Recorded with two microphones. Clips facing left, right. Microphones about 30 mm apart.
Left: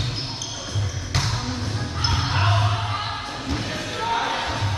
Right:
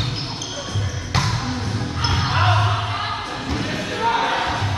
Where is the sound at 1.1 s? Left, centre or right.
Centre.